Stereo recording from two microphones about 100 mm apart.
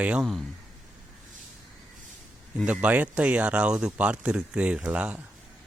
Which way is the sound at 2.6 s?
10° right (ahead or behind).